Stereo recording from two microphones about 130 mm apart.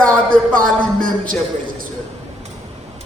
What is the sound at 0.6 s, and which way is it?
Speech, 90° right.